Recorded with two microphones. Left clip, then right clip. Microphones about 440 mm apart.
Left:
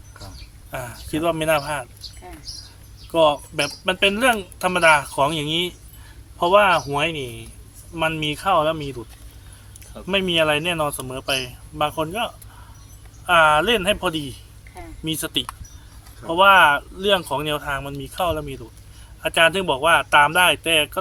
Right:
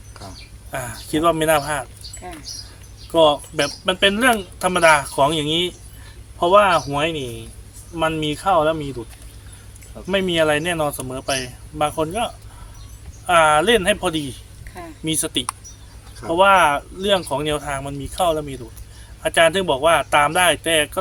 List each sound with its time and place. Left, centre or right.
0.7 s speech: left
3.1 s speech: left
10.1 s speech: left